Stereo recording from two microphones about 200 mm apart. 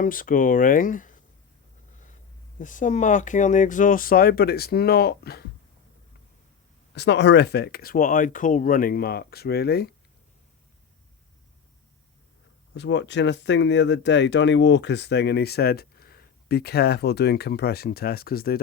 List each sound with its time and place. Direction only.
0.0 s speech: 45° left (ahead or behind)
2.6 s speech: 40° left (ahead or behind)
6.9 s speech: 60° left (ahead or behind)
12.7 s speech: 60° left (ahead or behind)